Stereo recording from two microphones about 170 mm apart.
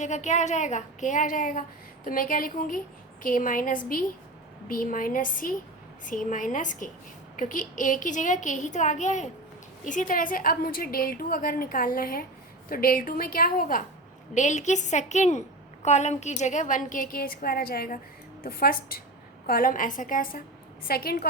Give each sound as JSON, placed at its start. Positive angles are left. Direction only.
{"t": 0.0, "sound": "a woman's voice", "side_deg": 45}
{"t": 14.3, "sound": "a woman's voice", "side_deg": 45}